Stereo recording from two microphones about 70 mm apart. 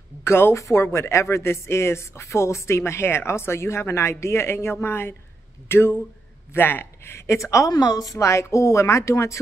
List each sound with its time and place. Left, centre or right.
0.2 s speech: left
7.7 s a woman's voice: left
8.2 s speech: left